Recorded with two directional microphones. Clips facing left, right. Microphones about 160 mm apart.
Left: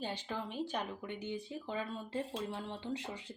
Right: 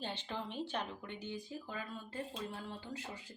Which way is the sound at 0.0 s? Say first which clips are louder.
Left 2 dB; 10° left (ahead or behind).